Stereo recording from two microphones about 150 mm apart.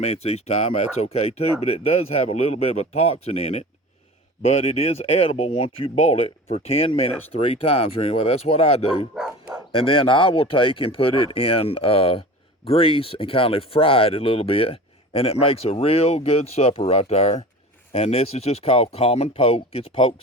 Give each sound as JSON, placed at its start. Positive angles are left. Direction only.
{"t": 0.0, "sound": "speech", "side_deg": 45}